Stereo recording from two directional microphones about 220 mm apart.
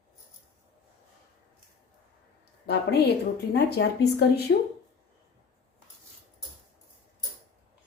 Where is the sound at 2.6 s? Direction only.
45° left (ahead or behind).